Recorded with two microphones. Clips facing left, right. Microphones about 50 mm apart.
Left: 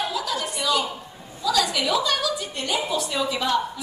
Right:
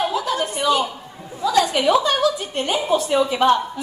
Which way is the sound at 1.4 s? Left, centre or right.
Right.